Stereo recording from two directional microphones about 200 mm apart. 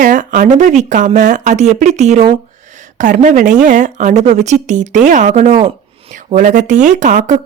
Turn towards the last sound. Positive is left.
turn(degrees=-40)  # may be behind; listen again after turning